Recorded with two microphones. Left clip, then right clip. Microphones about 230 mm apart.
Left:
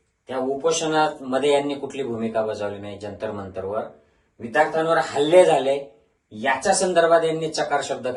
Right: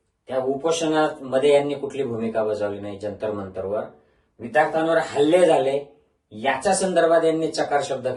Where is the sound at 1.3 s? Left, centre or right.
Centre.